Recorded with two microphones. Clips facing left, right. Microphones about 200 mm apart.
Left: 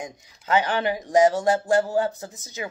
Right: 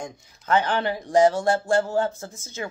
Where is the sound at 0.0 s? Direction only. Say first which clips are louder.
Even; 15° left (ahead or behind).